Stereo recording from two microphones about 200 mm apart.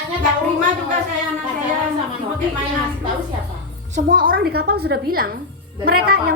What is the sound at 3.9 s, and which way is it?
A woman's voice, 45° right (ahead or behind).